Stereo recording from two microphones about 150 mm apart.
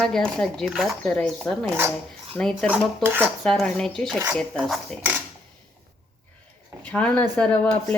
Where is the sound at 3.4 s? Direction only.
5° left (ahead or behind).